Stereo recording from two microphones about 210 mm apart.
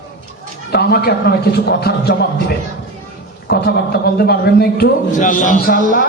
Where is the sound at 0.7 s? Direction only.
50° left (ahead or behind).